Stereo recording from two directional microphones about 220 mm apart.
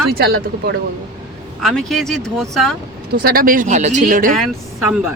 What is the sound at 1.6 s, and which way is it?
Speech, centre (ahead or behind).